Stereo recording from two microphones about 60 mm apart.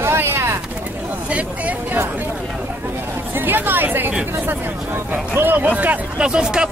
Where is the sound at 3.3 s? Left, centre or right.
Right.